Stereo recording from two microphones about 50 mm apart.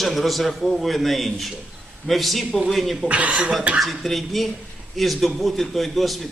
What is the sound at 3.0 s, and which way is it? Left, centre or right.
Speech, right.